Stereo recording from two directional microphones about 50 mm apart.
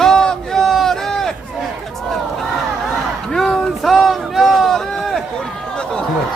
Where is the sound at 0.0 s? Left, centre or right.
Centre.